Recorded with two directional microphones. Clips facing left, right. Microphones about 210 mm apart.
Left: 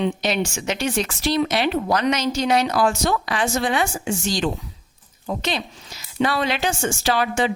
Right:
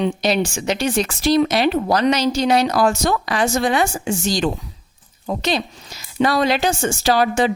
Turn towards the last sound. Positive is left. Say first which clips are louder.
# right 4 dB
turn(degrees=-40)  # may be behind; listen again after turning